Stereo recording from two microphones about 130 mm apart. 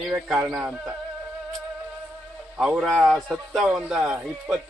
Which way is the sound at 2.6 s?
5° right (ahead or behind).